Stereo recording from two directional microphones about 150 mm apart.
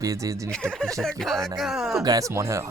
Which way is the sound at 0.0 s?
20° right (ahead or behind).